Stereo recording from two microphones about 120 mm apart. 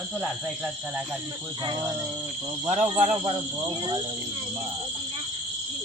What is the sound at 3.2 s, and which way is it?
Speech, 45° right (ahead or behind).